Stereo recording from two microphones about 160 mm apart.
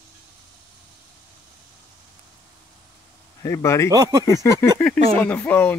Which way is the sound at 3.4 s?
20° left (ahead or behind).